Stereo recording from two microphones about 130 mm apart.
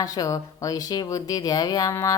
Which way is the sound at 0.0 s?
25° left (ahead or behind).